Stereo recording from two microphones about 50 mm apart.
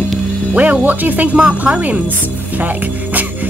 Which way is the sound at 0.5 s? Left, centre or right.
Right.